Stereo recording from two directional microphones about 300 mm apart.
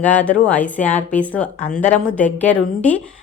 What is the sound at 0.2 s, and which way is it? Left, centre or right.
Speech, centre.